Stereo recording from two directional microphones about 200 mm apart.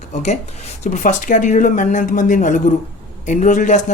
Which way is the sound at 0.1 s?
35° left (ahead or behind).